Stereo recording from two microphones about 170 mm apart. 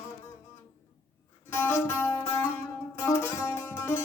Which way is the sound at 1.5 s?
15° left (ahead or behind).